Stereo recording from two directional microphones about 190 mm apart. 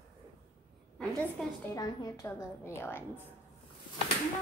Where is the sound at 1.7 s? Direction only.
15° left (ahead or behind).